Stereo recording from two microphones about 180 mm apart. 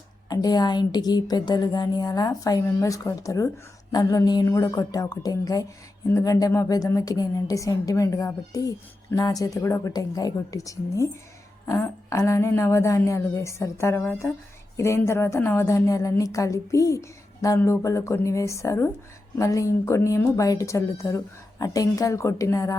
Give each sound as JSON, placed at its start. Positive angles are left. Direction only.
{"t": 0.3, "sound": "a woman's voice", "side_deg": 20}